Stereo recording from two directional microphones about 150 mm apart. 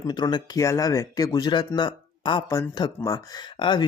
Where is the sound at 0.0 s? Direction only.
30° left (ahead or behind).